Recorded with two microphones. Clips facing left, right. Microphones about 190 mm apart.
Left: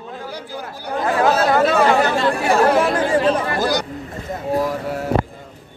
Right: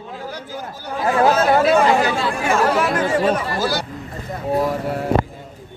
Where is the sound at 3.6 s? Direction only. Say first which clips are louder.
Left 2 dB; 15° left (ahead or behind).